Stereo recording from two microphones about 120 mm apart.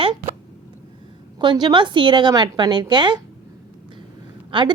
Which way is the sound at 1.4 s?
40° right (ahead or behind).